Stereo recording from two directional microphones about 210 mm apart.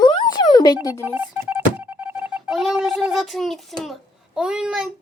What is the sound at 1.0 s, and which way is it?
Speech, 10° right (ahead or behind).